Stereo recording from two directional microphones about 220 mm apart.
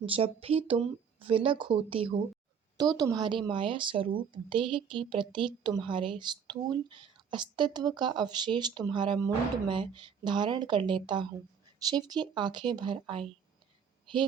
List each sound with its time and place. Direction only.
0.0 s speech: 25° right (ahead or behind)